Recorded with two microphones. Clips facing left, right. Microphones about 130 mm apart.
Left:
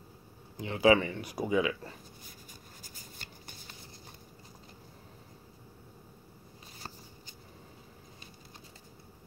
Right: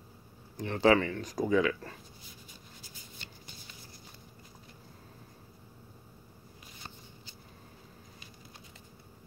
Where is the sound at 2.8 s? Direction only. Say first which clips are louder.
Even; 45° left (ahead or behind).